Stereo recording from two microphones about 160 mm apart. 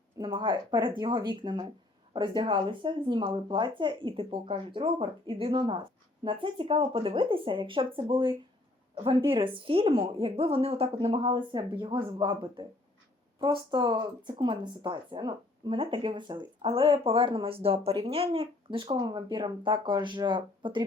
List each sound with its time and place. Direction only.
0.2 s a woman's voice: 30° right (ahead or behind)